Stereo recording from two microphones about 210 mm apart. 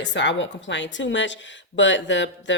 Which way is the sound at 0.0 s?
60° left (ahead or behind).